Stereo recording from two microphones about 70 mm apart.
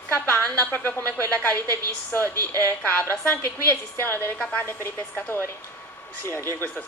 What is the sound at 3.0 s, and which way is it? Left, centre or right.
Speech, left.